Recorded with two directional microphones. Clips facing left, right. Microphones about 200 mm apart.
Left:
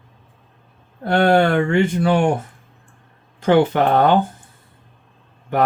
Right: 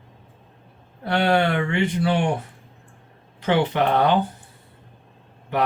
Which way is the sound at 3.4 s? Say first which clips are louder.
Left 5 dB; 45° left (ahead or behind).